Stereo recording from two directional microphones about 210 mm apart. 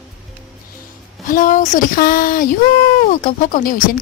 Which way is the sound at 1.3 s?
40° left (ahead or behind).